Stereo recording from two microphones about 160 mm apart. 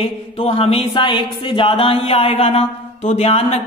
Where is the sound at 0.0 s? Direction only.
40° left (ahead or behind).